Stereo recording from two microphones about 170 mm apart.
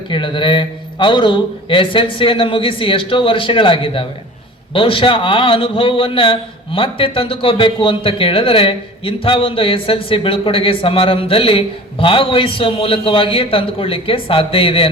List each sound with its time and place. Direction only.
0.1 s a man's voice: 30° left (ahead or behind)